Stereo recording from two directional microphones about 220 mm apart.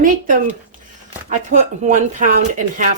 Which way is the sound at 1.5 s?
35° right (ahead or behind).